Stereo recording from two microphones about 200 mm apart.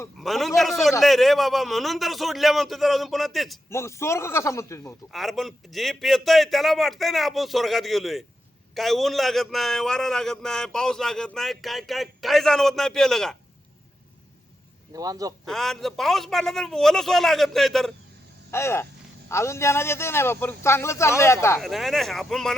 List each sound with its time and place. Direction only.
0.2 s a man's voice: centre (ahead or behind)
3.7 s a man's voice: 15° left (ahead or behind)
5.1 s a man's voice: centre (ahead or behind)
14.9 s a man's voice: 20° right (ahead or behind)
15.4 s a man's voice: centre (ahead or behind)
18.5 s a man's voice: 10° left (ahead or behind)
21.6 s a man's voice: centre (ahead or behind)